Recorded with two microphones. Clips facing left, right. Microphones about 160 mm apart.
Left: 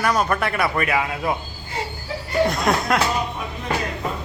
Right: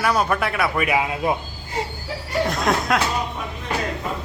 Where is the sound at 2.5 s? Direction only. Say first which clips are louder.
Even; centre (ahead or behind).